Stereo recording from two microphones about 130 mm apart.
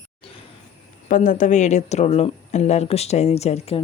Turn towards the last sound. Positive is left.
turn(degrees=50)  # may be behind; listen again after turning